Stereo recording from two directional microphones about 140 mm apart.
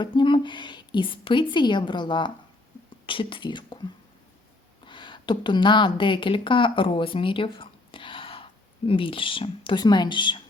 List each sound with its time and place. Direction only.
0.0 s a woman's voice: 35° left (ahead or behind)
4.9 s a woman's voice: 35° left (ahead or behind)